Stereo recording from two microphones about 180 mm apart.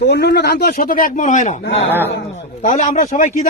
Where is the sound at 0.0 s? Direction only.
70° left (ahead or behind).